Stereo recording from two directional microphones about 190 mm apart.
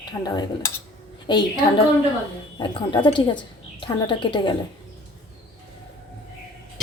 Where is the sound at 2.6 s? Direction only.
25° left (ahead or behind).